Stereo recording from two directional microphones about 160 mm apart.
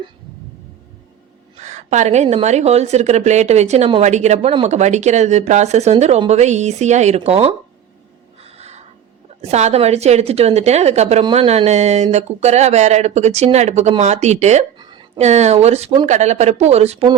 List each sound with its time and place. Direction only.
1.5 s speech: 45° right (ahead or behind)
8.4 s crow: 40° right (ahead or behind)
9.4 s a woman's voice: 45° right (ahead or behind)
14.8 s a sound: 30° right (ahead or behind)
15.2 s a woman's voice: 45° right (ahead or behind)